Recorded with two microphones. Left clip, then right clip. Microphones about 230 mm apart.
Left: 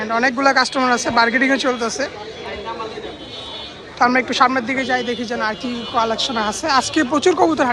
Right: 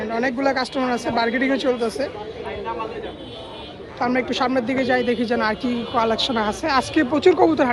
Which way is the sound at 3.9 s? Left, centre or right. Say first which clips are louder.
Left 7 dB; centre.